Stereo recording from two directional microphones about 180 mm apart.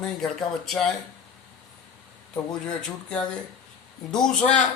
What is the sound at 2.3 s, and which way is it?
Speech, 5° left (ahead or behind).